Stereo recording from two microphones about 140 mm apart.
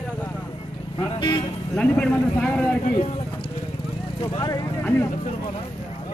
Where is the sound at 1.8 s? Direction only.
10° left (ahead or behind).